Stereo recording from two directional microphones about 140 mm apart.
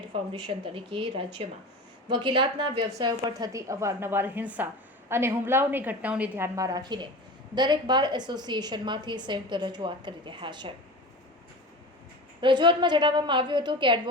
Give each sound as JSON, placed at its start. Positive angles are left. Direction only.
{"t": 0.1, "sound": "a woman's voice", "side_deg": -35}
{"t": 12.4, "sound": "a woman's voice", "side_deg": -35}